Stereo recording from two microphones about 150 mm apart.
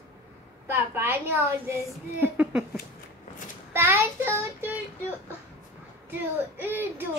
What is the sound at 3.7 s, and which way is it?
A child's voice, 15° right (ahead or behind).